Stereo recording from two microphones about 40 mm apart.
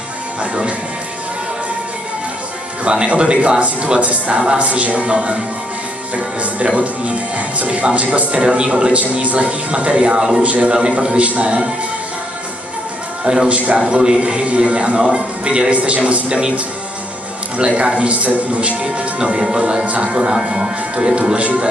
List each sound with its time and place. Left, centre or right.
0.4 s music: right
2.8 s speech: right
13.2 s speech: centre
13.5 s speech: right
13.8 s speech: centre
17.6 s speech: right
21.4 s speech: right